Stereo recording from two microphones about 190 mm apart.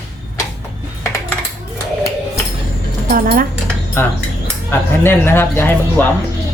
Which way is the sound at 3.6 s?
10° left (ahead or behind).